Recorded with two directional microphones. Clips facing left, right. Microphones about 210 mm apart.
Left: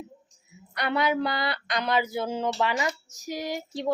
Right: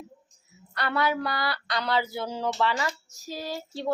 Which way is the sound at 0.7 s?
15° left (ahead or behind).